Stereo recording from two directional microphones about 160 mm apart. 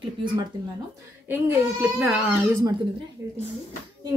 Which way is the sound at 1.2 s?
10° right (ahead or behind).